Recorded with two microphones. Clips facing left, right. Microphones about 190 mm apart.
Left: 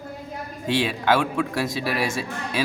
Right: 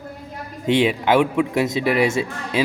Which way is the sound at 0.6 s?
20° right (ahead or behind).